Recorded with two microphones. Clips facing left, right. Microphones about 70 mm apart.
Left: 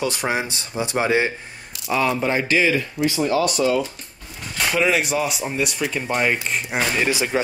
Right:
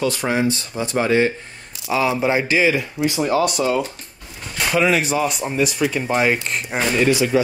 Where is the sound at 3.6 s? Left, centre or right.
Right.